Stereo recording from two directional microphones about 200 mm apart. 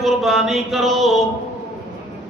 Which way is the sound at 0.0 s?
Centre (ahead or behind).